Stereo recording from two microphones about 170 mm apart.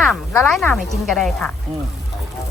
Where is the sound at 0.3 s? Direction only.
5° left (ahead or behind).